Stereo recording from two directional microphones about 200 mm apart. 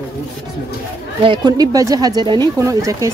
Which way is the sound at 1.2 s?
20° right (ahead or behind).